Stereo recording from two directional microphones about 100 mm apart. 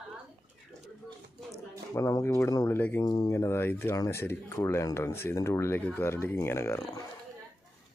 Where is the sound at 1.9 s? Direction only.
30° left (ahead or behind).